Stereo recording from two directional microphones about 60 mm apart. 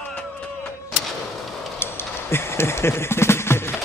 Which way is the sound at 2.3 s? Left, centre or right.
Left.